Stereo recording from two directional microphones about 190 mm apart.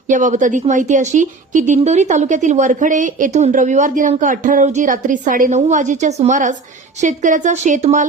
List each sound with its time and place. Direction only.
0.1 s a woman's voice: 40° right (ahead or behind)